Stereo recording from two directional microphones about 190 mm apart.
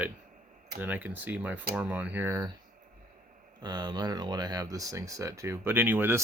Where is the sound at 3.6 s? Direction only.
20° right (ahead or behind).